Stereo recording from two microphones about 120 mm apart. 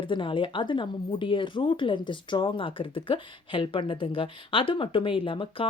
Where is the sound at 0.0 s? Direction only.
45° left (ahead or behind).